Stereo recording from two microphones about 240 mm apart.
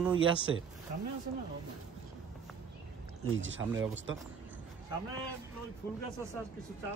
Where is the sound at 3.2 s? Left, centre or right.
Right.